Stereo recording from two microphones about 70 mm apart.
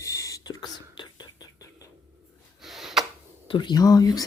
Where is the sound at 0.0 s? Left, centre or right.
Left.